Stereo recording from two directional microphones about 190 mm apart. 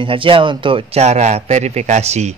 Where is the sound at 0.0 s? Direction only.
25° right (ahead or behind).